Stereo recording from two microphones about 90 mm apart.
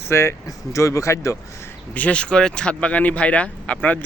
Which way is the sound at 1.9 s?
15° left (ahead or behind).